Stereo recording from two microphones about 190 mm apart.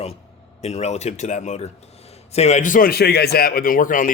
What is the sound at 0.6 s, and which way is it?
A man's voice, 35° left (ahead or behind).